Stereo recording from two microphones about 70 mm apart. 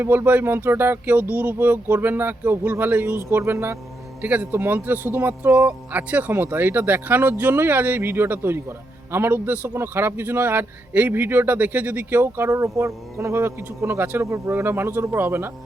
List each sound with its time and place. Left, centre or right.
0.0 s speech: right
3.2 s speech: right
4.2 s speech: right
12.2 s speech: right
14.3 s speech: right